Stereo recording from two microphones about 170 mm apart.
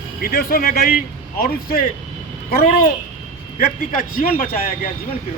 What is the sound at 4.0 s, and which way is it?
Speech, 60° left (ahead or behind).